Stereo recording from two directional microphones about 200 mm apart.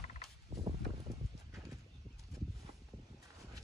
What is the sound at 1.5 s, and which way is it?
Clip-clop, 15° right (ahead or behind).